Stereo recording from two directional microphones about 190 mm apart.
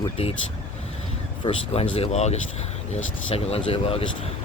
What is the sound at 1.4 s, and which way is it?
Speech, 25° left (ahead or behind).